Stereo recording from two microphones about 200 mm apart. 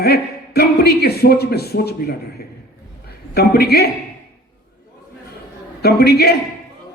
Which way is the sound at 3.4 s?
50° left (ahead or behind).